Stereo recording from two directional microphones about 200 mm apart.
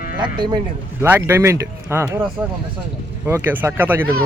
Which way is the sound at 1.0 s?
10° right (ahead or behind).